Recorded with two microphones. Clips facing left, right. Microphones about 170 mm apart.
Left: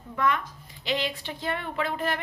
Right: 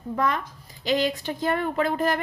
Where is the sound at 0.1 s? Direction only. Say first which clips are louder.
Right 1 dB; 35° right (ahead or behind).